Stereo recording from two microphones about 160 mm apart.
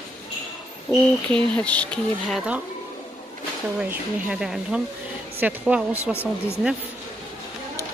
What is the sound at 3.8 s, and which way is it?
Speech, 5° right (ahead or behind).